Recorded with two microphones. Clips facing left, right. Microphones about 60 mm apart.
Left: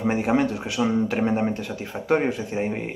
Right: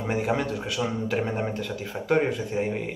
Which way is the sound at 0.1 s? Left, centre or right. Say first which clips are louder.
Left 2 dB; left.